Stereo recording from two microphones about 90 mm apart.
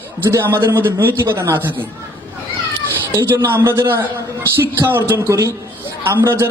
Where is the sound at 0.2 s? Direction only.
30° right (ahead or behind).